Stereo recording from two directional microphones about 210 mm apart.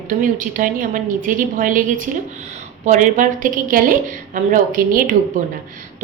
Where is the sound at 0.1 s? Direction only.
40° right (ahead or behind).